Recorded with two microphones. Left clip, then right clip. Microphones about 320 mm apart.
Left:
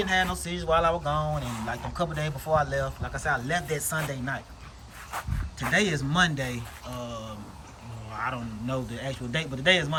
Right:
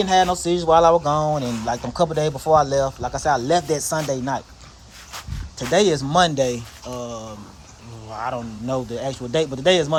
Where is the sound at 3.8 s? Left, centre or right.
Centre.